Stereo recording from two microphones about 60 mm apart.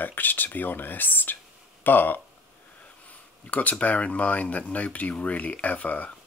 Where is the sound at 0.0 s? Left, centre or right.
Left.